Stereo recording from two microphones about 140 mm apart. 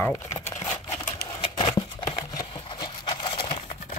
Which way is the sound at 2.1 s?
30° left (ahead or behind).